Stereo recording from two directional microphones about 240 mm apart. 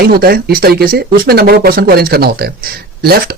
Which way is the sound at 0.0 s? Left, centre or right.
Right.